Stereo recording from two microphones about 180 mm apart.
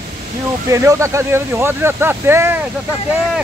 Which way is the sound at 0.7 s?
15° right (ahead or behind).